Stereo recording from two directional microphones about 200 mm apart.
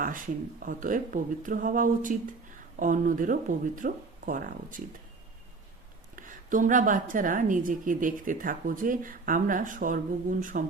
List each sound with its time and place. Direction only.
0.6 s a woman's voice: 40° right (ahead or behind)
6.1 s a woman's voice: 40° right (ahead or behind)